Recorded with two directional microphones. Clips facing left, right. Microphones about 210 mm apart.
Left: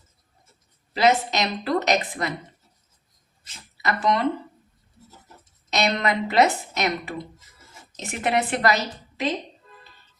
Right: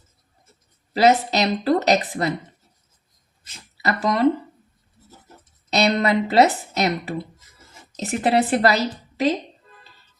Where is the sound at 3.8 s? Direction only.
35° right (ahead or behind).